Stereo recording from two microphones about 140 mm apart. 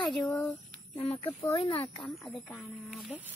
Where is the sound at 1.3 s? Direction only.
20° left (ahead or behind).